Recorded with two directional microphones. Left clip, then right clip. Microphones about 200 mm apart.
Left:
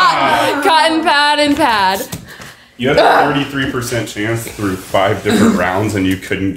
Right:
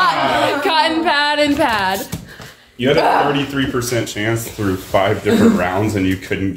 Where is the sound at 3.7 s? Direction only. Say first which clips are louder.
Left 1 dB; 50° right (ahead or behind).